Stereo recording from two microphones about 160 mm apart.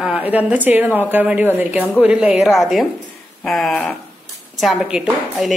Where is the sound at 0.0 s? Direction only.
10° right (ahead or behind).